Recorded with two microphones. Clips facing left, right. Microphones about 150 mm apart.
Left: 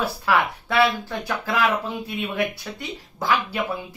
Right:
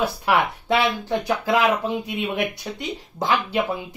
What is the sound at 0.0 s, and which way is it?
Speech, 20° right (ahead or behind).